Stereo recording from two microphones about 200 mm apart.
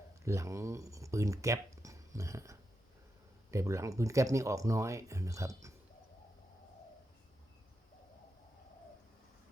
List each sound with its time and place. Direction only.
0.3 s speech: 15° right (ahead or behind)